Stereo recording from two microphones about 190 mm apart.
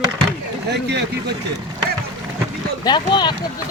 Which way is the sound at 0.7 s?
65° right (ahead or behind).